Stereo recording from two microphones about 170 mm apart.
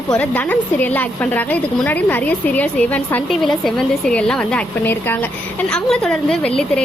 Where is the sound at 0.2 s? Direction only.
10° left (ahead or behind).